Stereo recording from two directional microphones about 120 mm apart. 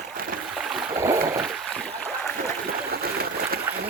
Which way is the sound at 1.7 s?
5° left (ahead or behind).